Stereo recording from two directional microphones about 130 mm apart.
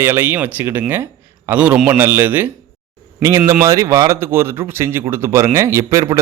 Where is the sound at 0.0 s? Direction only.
15° right (ahead or behind).